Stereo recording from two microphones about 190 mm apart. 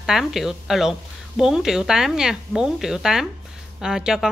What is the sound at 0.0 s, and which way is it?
Speech, centre (ahead or behind).